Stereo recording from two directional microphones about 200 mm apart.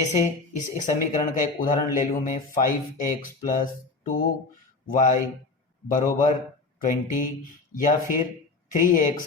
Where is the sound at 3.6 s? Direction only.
40° left (ahead or behind).